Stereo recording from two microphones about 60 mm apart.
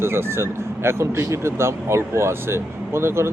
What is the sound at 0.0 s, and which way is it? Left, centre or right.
Speech, right.